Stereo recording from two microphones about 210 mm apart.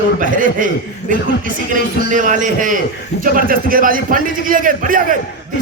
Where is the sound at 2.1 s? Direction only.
40° right (ahead or behind).